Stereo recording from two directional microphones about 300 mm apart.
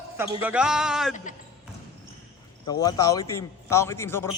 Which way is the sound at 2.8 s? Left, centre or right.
Centre.